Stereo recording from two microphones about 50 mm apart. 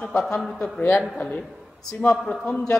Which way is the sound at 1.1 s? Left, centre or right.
Centre.